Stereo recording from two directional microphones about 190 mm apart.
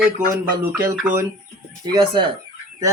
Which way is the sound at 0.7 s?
10° right (ahead or behind).